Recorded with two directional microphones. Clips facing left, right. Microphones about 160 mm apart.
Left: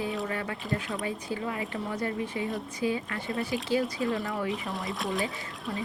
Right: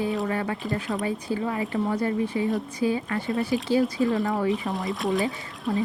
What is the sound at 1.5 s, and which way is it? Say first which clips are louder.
Speech: right 7 dB; 35° right (ahead or behind).